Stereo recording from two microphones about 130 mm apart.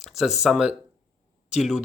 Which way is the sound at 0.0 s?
Centre (ahead or behind).